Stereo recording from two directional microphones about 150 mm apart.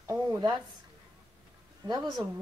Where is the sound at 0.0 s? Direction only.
20° right (ahead or behind).